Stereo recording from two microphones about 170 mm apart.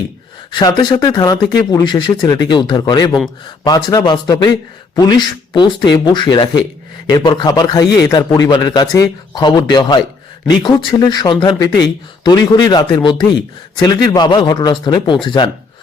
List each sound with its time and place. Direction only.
0.5 s speech: 25° left (ahead or behind)